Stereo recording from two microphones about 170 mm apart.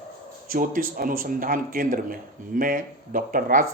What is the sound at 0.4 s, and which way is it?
Speech, 55° right (ahead or behind).